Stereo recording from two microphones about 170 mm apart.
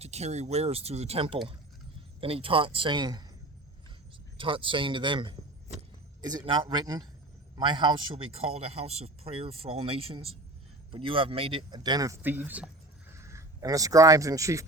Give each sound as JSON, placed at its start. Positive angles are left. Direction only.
{"t": 0.0, "sound": "a man's voice", "side_deg": -40}
{"t": 4.4, "sound": "speech", "side_deg": -30}
{"t": 6.4, "sound": "a man's voice", "side_deg": -30}